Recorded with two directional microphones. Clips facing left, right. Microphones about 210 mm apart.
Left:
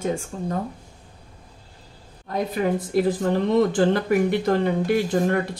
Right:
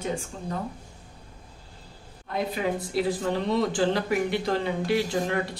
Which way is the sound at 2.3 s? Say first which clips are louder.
Left 4 dB; 45° left (ahead or behind).